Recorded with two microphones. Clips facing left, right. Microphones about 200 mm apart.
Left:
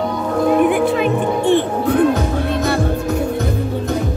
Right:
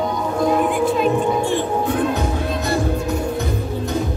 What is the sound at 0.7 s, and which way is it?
Music, 65° left (ahead or behind).